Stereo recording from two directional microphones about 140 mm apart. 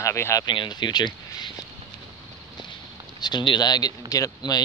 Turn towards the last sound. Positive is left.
turn(degrees=25)  # may be behind; listen again after turning